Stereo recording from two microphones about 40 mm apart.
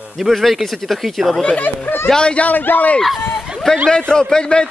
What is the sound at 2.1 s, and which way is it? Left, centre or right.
Speech, left.